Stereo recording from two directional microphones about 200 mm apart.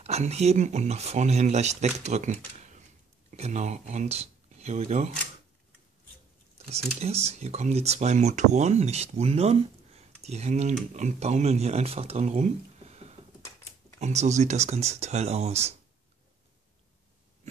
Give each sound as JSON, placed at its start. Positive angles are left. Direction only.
{"t": 0.0, "sound": "speech", "side_deg": -30}
{"t": 7.0, "sound": "speech", "side_deg": -30}